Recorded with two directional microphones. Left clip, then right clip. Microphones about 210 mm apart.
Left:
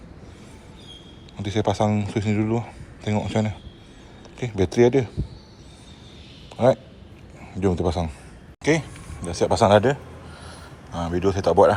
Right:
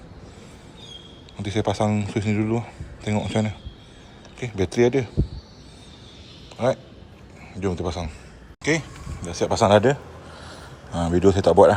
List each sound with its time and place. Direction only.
1.4 s speech: 15° right (ahead or behind)
6.6 s a man's voice: 5° right (ahead or behind); by 11.7 s 20° right (ahead or behind)